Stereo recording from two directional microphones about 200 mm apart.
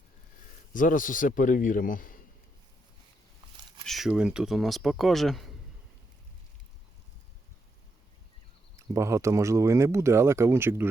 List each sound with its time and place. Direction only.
0.7 s a man's voice: 40° left (ahead or behind)
3.8 s speech: centre (ahead or behind)
8.7 s speech: 15° right (ahead or behind)